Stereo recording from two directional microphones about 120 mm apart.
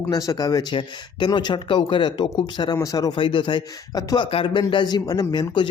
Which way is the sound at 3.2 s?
45° left (ahead or behind).